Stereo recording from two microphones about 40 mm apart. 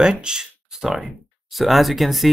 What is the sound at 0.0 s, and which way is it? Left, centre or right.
Speech, centre.